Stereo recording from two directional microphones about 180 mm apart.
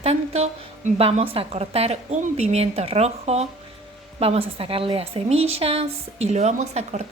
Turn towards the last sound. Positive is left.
turn(degrees=-40)  # may be behind; listen again after turning